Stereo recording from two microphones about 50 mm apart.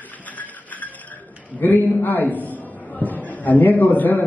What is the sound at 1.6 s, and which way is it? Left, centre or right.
A man's voice, left.